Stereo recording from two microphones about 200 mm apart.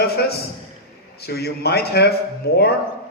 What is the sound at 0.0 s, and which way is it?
A man's voice, 50° left (ahead or behind).